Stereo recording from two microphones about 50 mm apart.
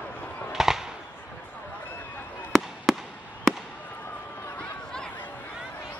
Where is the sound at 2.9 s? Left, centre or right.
Centre.